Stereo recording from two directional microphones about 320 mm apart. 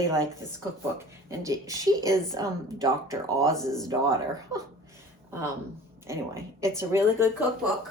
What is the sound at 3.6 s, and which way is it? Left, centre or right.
Speech, centre.